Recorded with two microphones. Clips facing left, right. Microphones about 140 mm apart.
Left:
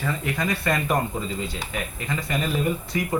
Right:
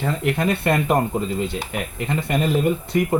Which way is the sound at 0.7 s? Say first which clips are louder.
Right 5 dB; 55° right (ahead or behind).